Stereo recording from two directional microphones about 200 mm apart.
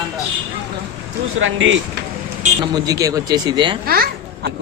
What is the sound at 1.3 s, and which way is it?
Speech, 75° right (ahead or behind).